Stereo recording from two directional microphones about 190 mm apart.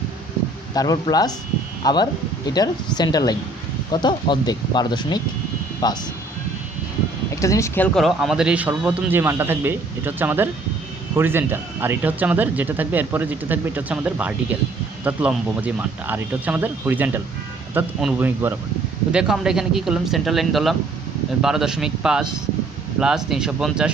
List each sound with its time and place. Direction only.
0.7 s speech: 20° left (ahead or behind)
7.3 s speech: 15° left (ahead or behind)
7.9 s speech: centre (ahead or behind)